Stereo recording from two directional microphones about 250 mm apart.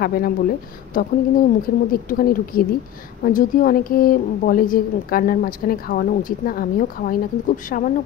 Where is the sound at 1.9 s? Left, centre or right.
Left.